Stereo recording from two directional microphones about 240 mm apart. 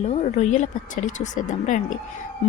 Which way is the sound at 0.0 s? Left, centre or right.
Left.